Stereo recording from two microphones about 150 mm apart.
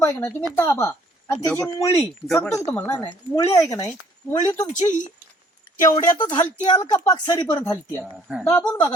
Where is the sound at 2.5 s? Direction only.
20° left (ahead or behind).